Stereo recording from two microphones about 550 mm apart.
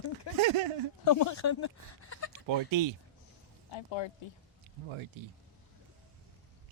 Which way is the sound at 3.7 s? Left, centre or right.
Left.